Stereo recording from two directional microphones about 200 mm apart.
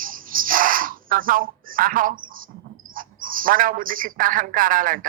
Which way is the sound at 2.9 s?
45° right (ahead or behind).